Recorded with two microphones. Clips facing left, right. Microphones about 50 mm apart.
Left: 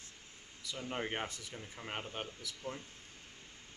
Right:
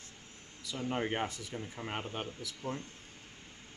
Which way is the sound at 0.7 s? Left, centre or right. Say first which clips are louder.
Right 5 dB; centre.